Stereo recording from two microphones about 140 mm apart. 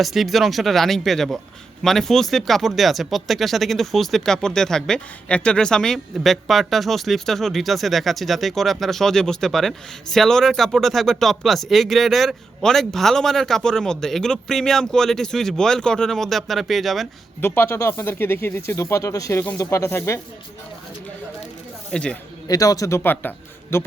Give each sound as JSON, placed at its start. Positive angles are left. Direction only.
{"t": 0.0, "sound": "speech", "side_deg": 0}
{"t": 17.4, "sound": "speech", "side_deg": 15}
{"t": 21.9, "sound": "speech", "side_deg": 5}
{"t": 22.4, "sound": "a man's voice", "side_deg": 25}